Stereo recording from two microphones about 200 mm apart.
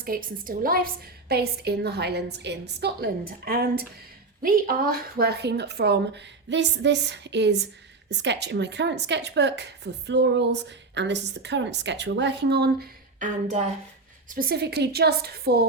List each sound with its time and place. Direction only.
0.0 s a woman's voice: 45° right (ahead or behind)
14.3 s a woman's voice: 50° right (ahead or behind)